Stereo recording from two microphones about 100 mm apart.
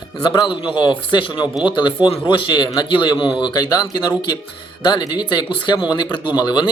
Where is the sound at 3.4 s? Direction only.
40° left (ahead or behind).